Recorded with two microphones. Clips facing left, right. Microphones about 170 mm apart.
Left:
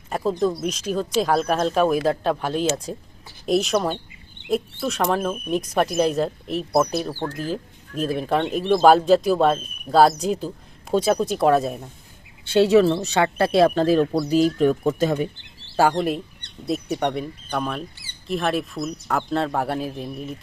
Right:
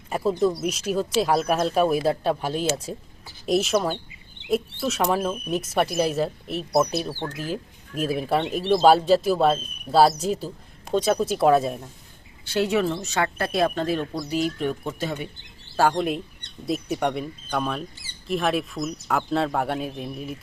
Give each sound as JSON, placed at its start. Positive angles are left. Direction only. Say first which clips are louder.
{"t": 0.1, "sound": "a sound", "louder": "even", "side_deg": -5}
{"t": 0.6, "sound": "speech", "louder": "even", "side_deg": -5}
{"t": 12.5, "sound": "speech", "louder": "left 7 dB", "side_deg": 30}
{"t": 15.8, "sound": "speech", "louder": "left 2 dB", "side_deg": 5}